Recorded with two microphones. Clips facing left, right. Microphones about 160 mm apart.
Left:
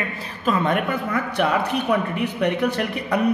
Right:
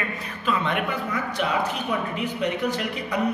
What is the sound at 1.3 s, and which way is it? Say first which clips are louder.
Speech: left 5 dB; 60° left (ahead or behind).